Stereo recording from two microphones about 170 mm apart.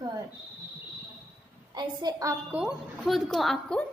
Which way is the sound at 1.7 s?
25° right (ahead or behind).